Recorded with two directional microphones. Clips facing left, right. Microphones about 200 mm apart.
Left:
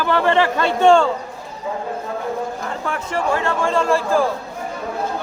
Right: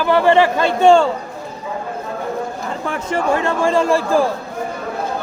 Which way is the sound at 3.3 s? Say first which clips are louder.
Right 3 dB; 15° right (ahead or behind).